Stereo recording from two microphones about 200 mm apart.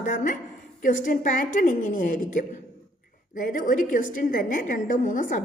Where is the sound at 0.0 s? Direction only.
40° left (ahead or behind).